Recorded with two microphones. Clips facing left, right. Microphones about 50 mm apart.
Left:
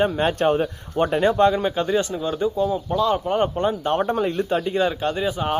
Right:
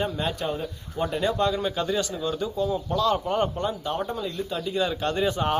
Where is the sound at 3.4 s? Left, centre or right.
Left.